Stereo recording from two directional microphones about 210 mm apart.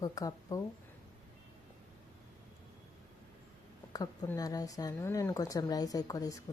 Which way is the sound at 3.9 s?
15° left (ahead or behind).